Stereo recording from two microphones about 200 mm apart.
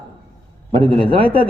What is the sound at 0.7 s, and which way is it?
Speech, 25° right (ahead or behind).